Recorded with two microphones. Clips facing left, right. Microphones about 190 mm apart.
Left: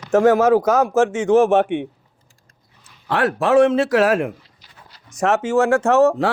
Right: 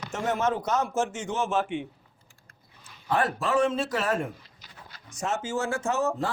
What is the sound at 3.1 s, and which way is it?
A man's voice, 80° left.